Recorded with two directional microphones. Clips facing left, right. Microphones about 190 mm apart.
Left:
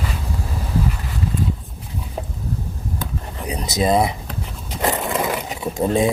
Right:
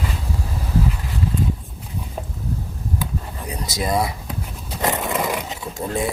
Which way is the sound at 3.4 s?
20° left (ahead or behind).